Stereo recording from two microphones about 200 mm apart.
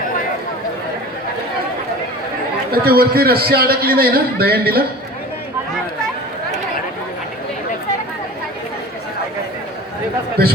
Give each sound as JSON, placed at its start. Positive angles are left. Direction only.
{"t": 2.7, "sound": "a man's voice", "side_deg": -50}